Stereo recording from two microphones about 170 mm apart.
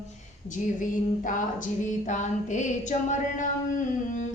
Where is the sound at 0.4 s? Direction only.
50° left (ahead or behind).